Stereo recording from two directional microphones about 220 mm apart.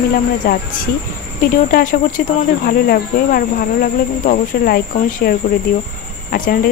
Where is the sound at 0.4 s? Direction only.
40° left (ahead or behind).